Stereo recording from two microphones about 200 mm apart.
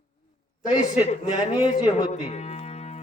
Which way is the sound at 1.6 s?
20° left (ahead or behind).